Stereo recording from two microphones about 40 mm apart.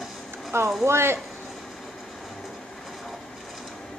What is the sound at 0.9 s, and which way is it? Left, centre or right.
Speech, right.